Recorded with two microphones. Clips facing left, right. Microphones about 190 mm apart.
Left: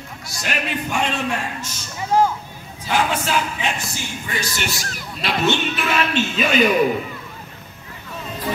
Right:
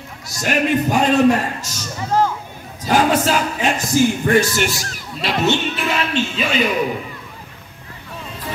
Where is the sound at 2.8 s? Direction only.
40° right (ahead or behind).